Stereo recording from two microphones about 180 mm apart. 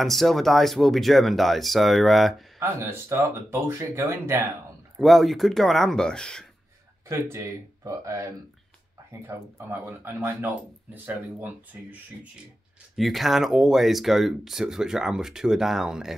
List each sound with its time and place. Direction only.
0.0 s speech: centre (ahead or behind)
2.6 s speech: 15° right (ahead or behind)
4.9 s speech: centre (ahead or behind)
7.1 s speech: 15° right (ahead or behind)